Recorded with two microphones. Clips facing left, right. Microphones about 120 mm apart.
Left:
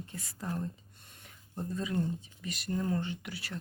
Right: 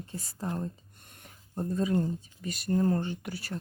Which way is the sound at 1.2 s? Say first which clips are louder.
Right 5 dB; 45° right (ahead or behind).